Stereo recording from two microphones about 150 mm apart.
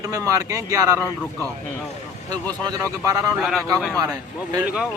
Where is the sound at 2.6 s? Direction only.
25° right (ahead or behind).